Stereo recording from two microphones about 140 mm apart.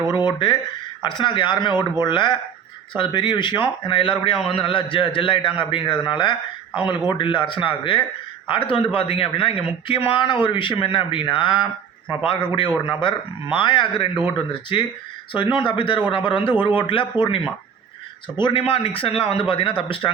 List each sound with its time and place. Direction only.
0.1 s speech: 35° left (ahead or behind)